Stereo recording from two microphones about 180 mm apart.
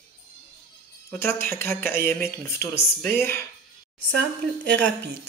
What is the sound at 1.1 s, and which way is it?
Speech, 15° left (ahead or behind).